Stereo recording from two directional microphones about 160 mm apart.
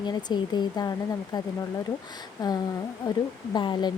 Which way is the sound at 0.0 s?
25° left (ahead or behind).